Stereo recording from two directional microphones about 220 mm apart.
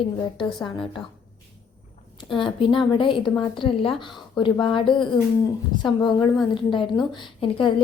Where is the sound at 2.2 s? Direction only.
20° left (ahead or behind).